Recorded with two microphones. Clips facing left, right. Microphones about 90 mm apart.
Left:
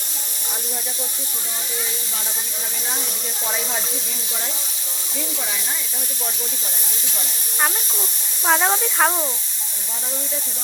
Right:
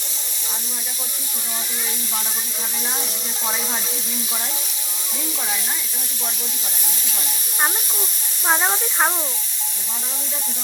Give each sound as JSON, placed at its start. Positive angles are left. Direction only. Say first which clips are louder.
{"t": 8.4, "sound": "speech", "louder": "left 2 dB", "side_deg": -5}